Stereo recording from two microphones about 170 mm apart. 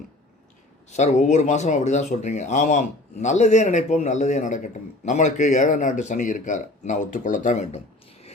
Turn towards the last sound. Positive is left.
turn(degrees=45)  # may be behind; listen again after turning